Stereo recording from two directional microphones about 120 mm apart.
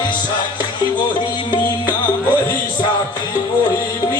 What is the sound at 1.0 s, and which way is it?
Music, 40° left (ahead or behind).